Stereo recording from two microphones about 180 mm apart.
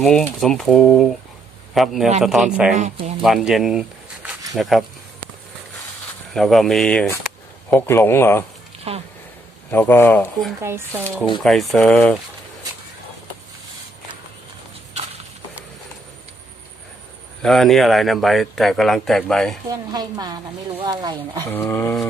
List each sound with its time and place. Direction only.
0.0 s speech: 5° left (ahead or behind)
6.3 s speech: centre (ahead or behind)
8.9 s speech: 35° right (ahead or behind)
9.7 s speech: 10° left (ahead or behind)
10.6 s speech: 15° right (ahead or behind)
11.0 s speech: 5° left (ahead or behind)
17.4 s speech: centre (ahead or behind)
19.6 s a woman's voice: 20° right (ahead or behind)
21.5 s speech: 10° left (ahead or behind)